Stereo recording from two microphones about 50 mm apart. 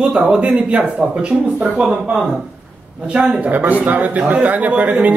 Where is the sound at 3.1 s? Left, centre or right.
Right.